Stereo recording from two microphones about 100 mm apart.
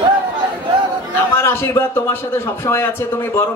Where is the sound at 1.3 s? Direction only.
25° left (ahead or behind).